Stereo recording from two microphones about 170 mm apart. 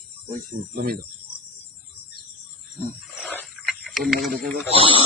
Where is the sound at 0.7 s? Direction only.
60° right (ahead or behind).